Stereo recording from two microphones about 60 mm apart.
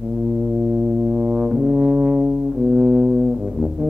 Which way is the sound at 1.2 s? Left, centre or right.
Centre.